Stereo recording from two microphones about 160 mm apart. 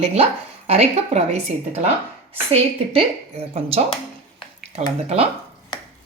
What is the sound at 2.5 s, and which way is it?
A woman's voice, 40° right (ahead or behind).